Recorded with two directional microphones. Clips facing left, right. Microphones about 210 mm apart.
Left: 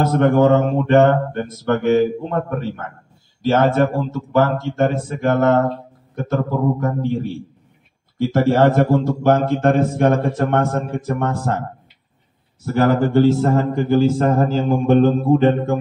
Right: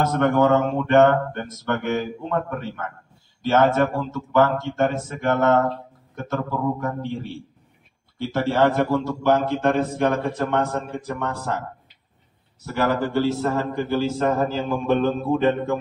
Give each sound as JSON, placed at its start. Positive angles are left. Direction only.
{"t": 0.0, "sound": "speech", "side_deg": 30}
{"t": 8.3, "sound": "a man's voice", "side_deg": 45}
{"t": 12.6, "sound": "a man's voice", "side_deg": 50}